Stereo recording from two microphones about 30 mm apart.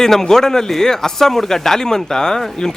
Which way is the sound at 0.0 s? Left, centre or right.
Centre.